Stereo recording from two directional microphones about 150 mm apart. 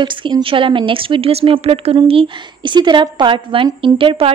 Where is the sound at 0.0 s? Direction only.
30° right (ahead or behind).